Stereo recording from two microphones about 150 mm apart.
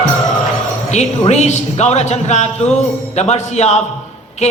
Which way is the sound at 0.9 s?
50° left (ahead or behind).